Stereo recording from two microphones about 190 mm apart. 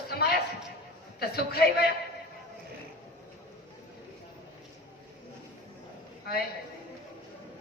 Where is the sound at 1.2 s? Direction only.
55° left (ahead or behind).